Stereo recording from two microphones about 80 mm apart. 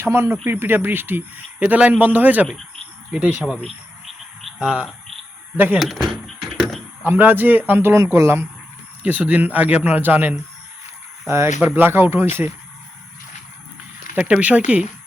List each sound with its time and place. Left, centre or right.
0.0 s a man's voice: right; by 3.6 s centre
3.6 s a sound: centre
4.6 s a man's voice: centre
5.8 s a sound: centre
7.0 s a man's voice: right
9.0 s a man's voice: centre
14.2 s speech: centre